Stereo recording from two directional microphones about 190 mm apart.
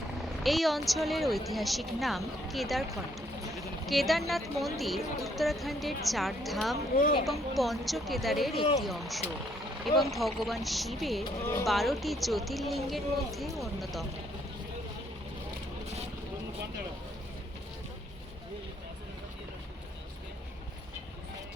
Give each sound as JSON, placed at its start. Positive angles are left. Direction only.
{"t": 0.4, "sound": "a woman's voice", "side_deg": 0}
{"t": 3.8, "sound": "a woman's voice", "side_deg": 0}
{"t": 6.9, "sound": "speech", "side_deg": 50}
{"t": 7.3, "sound": "a woman's voice", "side_deg": 0}